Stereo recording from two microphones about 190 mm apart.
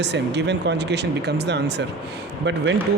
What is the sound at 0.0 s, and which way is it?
Speech, 65° right (ahead or behind).